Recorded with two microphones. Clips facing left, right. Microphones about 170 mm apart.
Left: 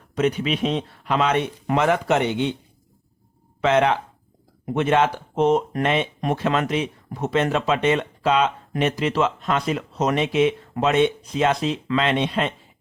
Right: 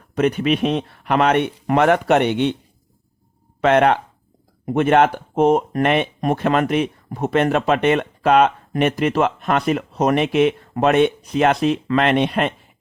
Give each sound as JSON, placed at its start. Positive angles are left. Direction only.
{"t": 0.2, "sound": "speech", "side_deg": -55}
{"t": 3.6, "sound": "speech", "side_deg": -60}